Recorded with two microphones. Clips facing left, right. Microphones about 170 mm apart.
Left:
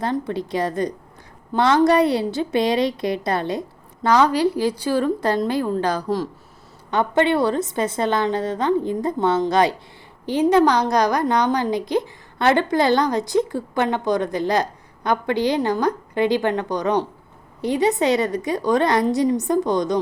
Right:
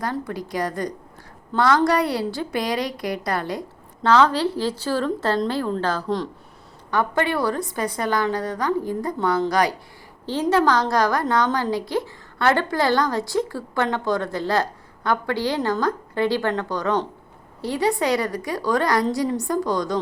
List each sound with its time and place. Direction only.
0.0 s a woman's voice: 25° left (ahead or behind)
4.0 s a woman's voice: 10° left (ahead or behind)
6.9 s a woman's voice: 25° left (ahead or behind)